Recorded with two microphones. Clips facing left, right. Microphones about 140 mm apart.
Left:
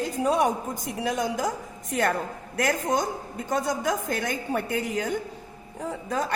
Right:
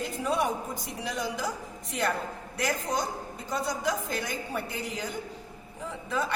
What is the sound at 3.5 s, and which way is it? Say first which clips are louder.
A woman's voice: left 4 dB; 50° left (ahead or behind).